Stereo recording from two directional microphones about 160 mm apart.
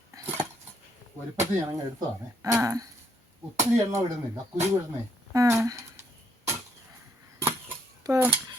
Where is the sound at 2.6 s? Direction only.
20° right (ahead or behind).